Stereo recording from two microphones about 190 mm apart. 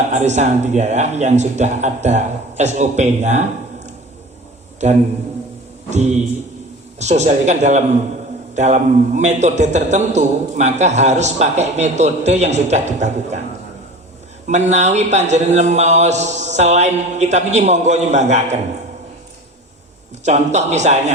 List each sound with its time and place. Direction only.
0.1 s a man's voice: 40° right (ahead or behind)
5.9 s a man's voice: 35° right (ahead or behind)
14.4 s a man's voice: 35° right (ahead or behind)
20.2 s a man's voice: 40° right (ahead or behind)